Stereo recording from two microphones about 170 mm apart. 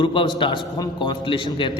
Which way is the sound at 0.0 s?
30° left (ahead or behind).